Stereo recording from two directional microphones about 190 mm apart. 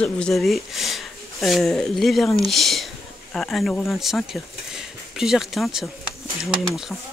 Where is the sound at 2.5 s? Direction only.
Centre (ahead or behind).